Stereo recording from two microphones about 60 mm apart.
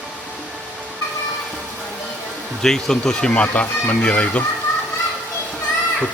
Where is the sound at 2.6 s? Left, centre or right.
Centre.